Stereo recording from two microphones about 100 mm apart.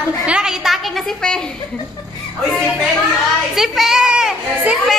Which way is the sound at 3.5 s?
Centre (ahead or behind).